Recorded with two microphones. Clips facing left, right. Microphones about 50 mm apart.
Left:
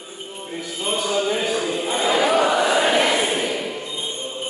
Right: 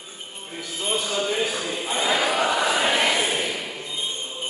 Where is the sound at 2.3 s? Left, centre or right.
Left.